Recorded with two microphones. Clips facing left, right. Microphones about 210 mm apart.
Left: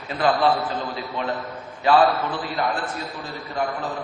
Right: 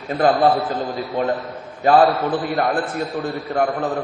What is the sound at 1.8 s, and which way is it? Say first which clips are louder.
Speech: right 3 dB; 45° right (ahead or behind).